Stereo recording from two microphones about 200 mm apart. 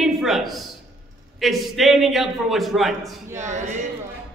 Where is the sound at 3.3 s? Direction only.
35° right (ahead or behind).